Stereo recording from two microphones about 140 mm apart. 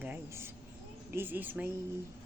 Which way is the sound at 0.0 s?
15° right (ahead or behind).